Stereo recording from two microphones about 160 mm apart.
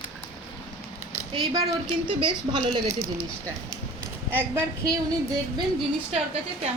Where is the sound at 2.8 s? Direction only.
20° right (ahead or behind).